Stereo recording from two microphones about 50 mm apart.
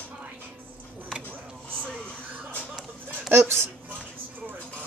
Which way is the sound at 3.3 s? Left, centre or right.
Right.